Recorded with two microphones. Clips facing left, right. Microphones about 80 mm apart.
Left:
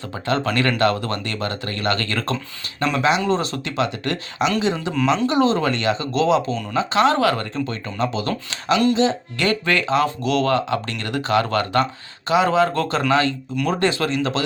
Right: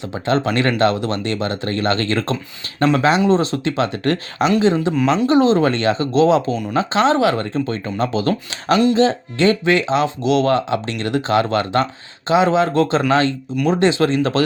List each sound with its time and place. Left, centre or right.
0.3 s speech: right
4.6 s speech: right